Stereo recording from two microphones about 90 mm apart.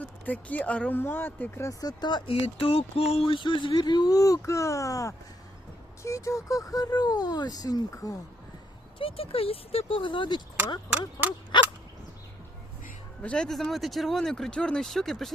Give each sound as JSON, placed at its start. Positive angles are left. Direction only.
{"t": 0.3, "sound": "speech", "side_deg": 15}
{"t": 1.8, "sound": "speech", "side_deg": 50}
{"t": 2.2, "sound": "speech", "side_deg": 90}
{"t": 9.0, "sound": "speech", "side_deg": 90}
{"t": 11.2, "sound": "speech", "side_deg": 50}
{"t": 13.2, "sound": "speech", "side_deg": 10}